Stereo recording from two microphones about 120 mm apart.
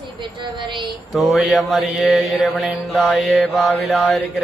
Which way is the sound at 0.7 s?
40° right (ahead or behind).